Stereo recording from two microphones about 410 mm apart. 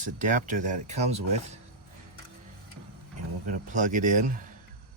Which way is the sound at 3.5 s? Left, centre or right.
Centre.